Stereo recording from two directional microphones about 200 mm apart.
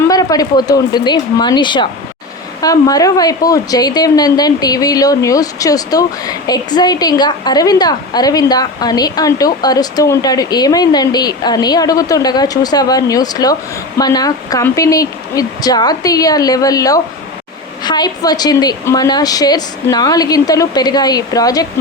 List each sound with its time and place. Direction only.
0.1 s speech: 20° left (ahead or behind)